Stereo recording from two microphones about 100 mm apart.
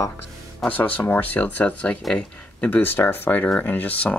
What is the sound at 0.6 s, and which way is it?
Speech, 15° left (ahead or behind).